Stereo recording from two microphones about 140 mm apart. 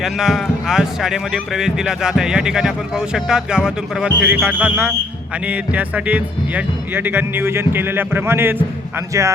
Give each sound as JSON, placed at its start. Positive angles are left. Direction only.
{"t": 0.0, "sound": "speech", "side_deg": 0}